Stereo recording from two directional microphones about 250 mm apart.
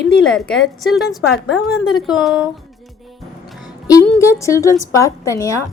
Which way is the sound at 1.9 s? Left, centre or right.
Centre.